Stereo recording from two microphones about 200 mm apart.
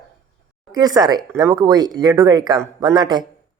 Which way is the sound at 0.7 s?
20° right (ahead or behind).